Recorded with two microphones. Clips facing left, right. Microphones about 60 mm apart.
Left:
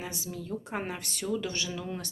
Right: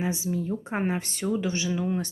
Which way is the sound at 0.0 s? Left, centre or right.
Right.